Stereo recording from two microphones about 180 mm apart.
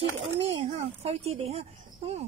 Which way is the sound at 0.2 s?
35° right (ahead or behind).